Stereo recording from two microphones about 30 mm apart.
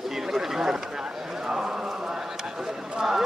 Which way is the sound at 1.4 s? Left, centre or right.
Right.